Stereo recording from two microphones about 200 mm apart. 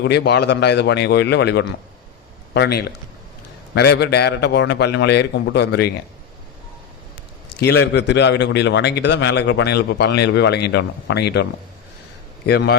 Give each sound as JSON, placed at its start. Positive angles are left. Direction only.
{"t": 0.0, "sound": "a man's voice", "side_deg": 55}
{"t": 7.5, "sound": "a man's voice", "side_deg": 55}
{"t": 12.5, "sound": "a man's voice", "side_deg": 55}